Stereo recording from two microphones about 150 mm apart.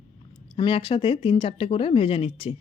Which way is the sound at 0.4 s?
40° left (ahead or behind).